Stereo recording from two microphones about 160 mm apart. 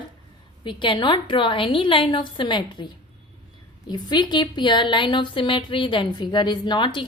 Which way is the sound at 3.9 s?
25° left (ahead or behind).